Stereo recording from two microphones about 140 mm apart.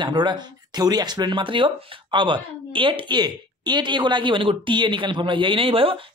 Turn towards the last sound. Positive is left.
turn(degrees=-40)  # may be behind; listen again after turning